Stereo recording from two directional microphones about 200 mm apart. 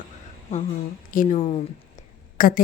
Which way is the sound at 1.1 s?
40° left (ahead or behind).